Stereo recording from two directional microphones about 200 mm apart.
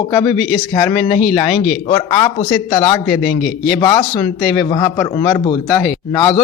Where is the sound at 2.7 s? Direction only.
20° left (ahead or behind).